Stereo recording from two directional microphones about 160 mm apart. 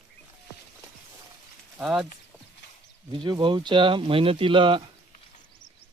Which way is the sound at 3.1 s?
30° right (ahead or behind).